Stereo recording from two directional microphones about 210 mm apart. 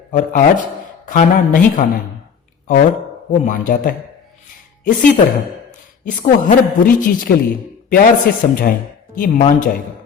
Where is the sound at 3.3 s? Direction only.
40° left (ahead or behind).